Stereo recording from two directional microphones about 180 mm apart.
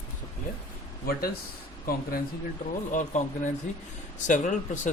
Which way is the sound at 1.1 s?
55° left (ahead or behind).